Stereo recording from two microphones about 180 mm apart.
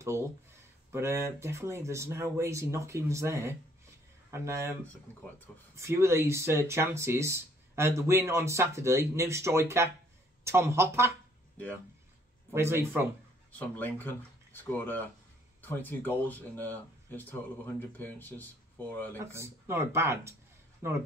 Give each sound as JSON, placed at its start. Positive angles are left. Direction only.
{"t": 0.9, "sound": "speech", "side_deg": -15}
{"t": 5.8, "sound": "speech", "side_deg": -15}
{"t": 12.5, "sound": "speech", "side_deg": -15}
{"t": 13.5, "sound": "speech", "side_deg": 10}
{"t": 19.1, "sound": "speech", "side_deg": -15}